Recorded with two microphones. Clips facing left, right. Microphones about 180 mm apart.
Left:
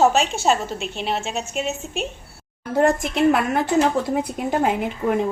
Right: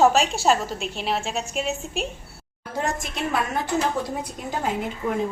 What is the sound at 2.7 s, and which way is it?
A woman's voice, 60° left (ahead or behind).